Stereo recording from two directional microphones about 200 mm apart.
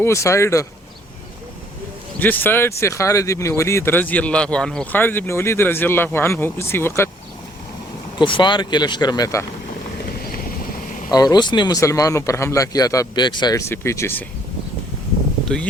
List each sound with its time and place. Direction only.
0.0 s speech: 15° left (ahead or behind)
2.1 s speech: 10° left (ahead or behind)
8.2 s speech: 25° left (ahead or behind)
11.1 s speech: 20° left (ahead or behind)